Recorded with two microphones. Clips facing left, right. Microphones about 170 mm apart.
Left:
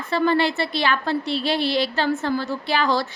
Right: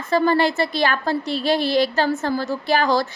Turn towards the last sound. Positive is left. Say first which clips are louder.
# right 3 dB
turn(degrees=-45)  # may be behind; listen again after turning